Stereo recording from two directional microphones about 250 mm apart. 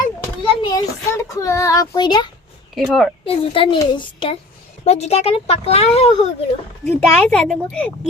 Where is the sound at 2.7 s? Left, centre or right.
Centre.